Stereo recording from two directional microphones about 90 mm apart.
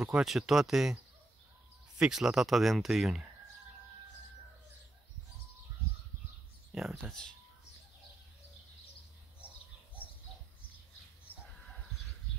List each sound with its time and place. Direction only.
0.0 s speech: 5° right (ahead or behind)
2.0 s speech: 5° right (ahead or behind)
7.0 s speech: 5° left (ahead or behind)
11.3 s a sound: 20° left (ahead or behind)